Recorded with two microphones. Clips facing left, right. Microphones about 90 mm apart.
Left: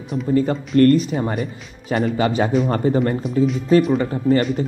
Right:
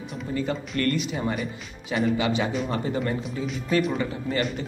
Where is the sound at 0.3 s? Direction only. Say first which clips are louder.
Left 10 dB; 40° left (ahead or behind).